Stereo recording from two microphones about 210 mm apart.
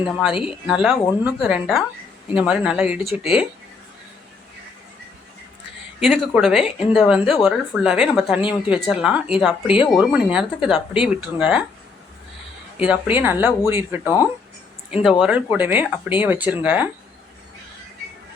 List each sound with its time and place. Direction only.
0.4 s speech: 5° right (ahead or behind)
6.0 s speech: centre (ahead or behind)
12.7 s speech: 5° right (ahead or behind)